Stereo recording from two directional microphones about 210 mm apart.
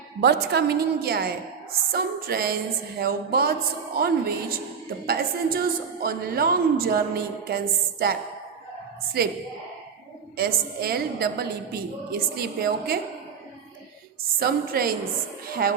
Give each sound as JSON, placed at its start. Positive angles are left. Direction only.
{"t": 0.2, "sound": "a woman's voice", "side_deg": -50}
{"t": 10.3, "sound": "a woman's voice", "side_deg": -45}
{"t": 14.3, "sound": "a woman's voice", "side_deg": -45}